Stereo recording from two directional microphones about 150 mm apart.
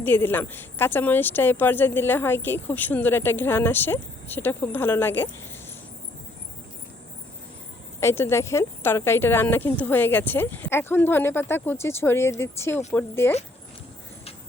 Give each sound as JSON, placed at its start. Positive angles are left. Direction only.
{"t": 0.0, "sound": "speech", "side_deg": 15}
{"t": 8.0, "sound": "speech", "side_deg": 15}